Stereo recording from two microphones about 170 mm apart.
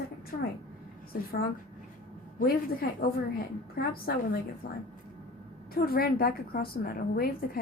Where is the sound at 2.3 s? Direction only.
55° left (ahead or behind).